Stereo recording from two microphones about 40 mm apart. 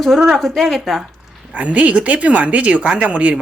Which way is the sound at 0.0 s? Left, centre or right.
Centre.